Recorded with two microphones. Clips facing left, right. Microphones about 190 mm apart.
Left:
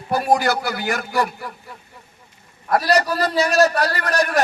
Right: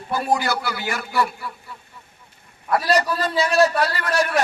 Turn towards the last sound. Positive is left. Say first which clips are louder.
# left 1 dB
turn(degrees=40)  # may be behind; listen again after turning